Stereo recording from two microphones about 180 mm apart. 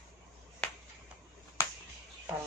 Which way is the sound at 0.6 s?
5° left (ahead or behind).